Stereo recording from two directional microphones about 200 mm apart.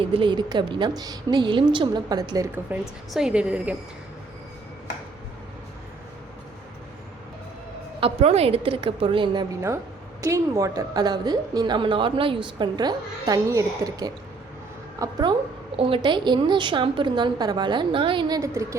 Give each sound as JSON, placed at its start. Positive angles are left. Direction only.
{"t": 0.1, "sound": "a woman's voice", "side_deg": -25}
{"t": 8.0, "sound": "a woman's voice", "side_deg": -30}